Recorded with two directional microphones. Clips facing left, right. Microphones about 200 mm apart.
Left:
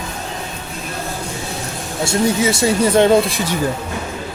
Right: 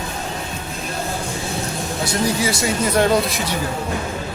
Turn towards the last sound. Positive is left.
turn(degrees=30)  # may be behind; listen again after turning